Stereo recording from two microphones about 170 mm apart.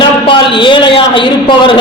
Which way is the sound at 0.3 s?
30° left (ahead or behind).